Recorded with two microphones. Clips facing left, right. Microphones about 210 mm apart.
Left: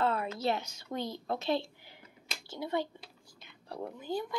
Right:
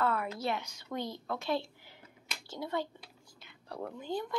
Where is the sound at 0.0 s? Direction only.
25° left (ahead or behind).